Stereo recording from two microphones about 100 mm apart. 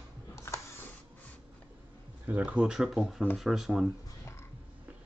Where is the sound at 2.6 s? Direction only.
5° right (ahead or behind).